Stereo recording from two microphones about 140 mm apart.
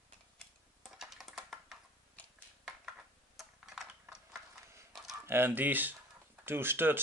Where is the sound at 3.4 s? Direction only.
5° right (ahead or behind).